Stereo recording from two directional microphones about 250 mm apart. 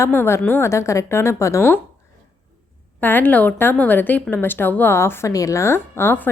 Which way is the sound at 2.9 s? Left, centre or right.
Centre.